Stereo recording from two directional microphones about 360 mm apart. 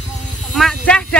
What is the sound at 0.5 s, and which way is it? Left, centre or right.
Speech, centre.